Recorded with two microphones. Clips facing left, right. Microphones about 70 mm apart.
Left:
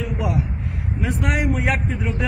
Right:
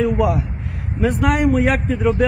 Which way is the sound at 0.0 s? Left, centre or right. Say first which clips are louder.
Right 8 dB; right.